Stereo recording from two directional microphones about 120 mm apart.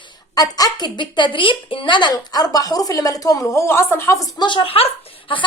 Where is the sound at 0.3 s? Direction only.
30° left (ahead or behind).